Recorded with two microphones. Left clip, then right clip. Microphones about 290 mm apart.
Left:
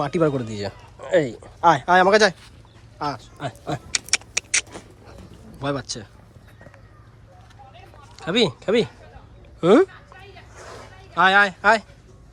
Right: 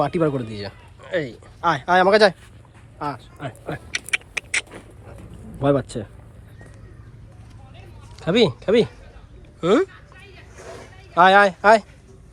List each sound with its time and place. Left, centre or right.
0.0 s speech: centre
3.0 s vehicle: centre
8.2 s speech: centre
9.9 s a sound: left
11.1 s speech: centre